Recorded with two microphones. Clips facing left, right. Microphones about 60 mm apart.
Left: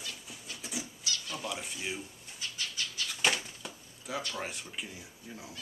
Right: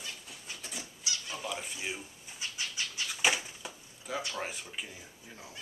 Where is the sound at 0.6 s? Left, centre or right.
Centre.